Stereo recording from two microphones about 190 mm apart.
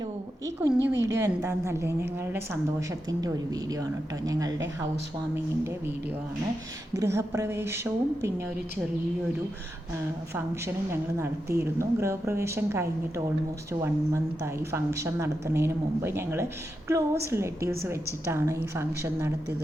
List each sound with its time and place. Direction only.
0.0 s a sound: 15° right (ahead or behind)
0.7 s a woman's voice: 10° right (ahead or behind)
5.6 s a woman's voice: 10° right (ahead or behind)
10.3 s a woman's voice: 15° right (ahead or behind)